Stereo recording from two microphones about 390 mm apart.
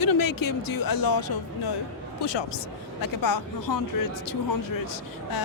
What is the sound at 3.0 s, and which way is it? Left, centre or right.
Speech, left.